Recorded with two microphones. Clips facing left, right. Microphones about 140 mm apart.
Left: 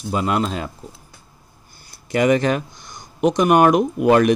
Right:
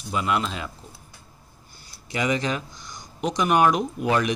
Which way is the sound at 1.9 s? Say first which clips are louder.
Left 8 dB; 55° left (ahead or behind).